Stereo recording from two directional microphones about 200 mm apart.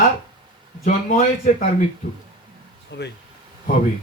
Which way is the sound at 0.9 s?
40° left (ahead or behind).